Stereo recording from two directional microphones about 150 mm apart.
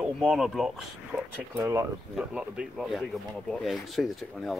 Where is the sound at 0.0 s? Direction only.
5° right (ahead or behind).